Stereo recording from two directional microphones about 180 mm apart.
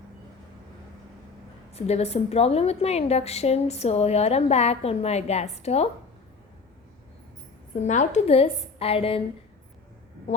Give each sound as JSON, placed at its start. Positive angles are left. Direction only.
{"t": 1.7, "sound": "a woman's voice", "side_deg": 35}
{"t": 7.8, "sound": "a woman's voice", "side_deg": 40}